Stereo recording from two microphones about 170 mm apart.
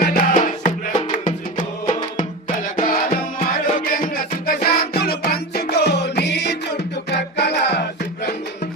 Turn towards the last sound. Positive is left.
turn(degrees=75)  # may be behind; listen again after turning